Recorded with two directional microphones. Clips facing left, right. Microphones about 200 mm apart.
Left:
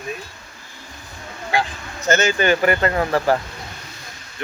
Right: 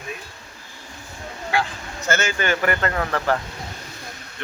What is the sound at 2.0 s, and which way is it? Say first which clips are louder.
Speech: left 5 dB; 20° left (ahead or behind).